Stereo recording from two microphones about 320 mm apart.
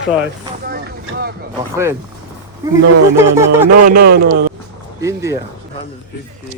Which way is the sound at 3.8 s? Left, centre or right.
Right.